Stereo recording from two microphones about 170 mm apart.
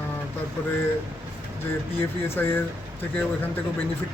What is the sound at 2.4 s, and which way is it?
Speech, 10° left (ahead or behind).